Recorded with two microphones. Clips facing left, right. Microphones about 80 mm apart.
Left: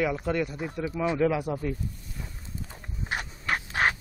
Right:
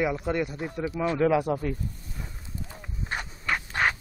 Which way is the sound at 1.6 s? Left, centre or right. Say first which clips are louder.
Right 1 dB; centre.